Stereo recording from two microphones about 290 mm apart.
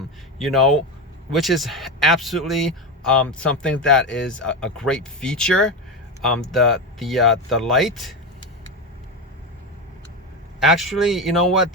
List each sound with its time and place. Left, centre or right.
0.3 s speech: centre
10.6 s speech: centre